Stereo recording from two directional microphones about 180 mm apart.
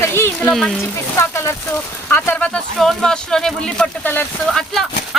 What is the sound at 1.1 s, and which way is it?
Speech, 15° left (ahead or behind).